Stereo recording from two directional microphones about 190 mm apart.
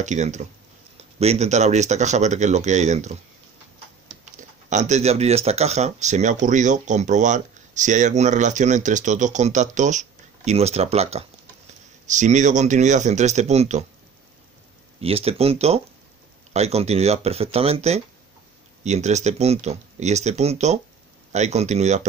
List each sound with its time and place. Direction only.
0.0 s speech: 40° right (ahead or behind)
4.4 s speech: 40° right (ahead or behind)
15.0 s speech: 30° right (ahead or behind)